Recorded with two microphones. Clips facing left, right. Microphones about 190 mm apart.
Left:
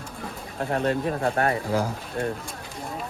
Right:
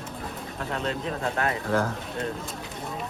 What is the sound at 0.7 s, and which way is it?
Speech, 55° left (ahead or behind).